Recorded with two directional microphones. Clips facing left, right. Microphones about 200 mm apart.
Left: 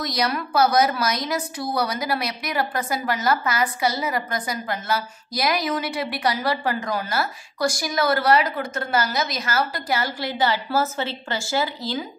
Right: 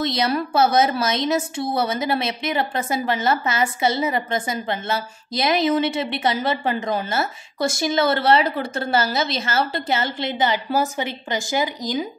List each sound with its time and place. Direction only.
0.0 s a woman's voice: 25° right (ahead or behind)